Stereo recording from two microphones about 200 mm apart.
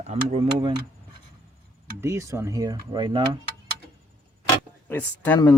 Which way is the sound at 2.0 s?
15° right (ahead or behind).